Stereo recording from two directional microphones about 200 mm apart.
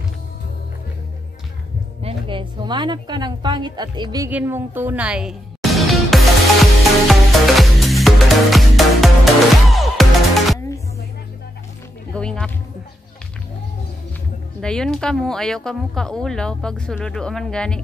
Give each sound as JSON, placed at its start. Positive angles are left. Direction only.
{"t": 2.0, "sound": "a woman's voice", "side_deg": -25}
{"t": 4.3, "sound": "music", "side_deg": -10}
{"t": 12.1, "sound": "music", "side_deg": 5}
{"t": 14.6, "sound": "speech", "side_deg": 5}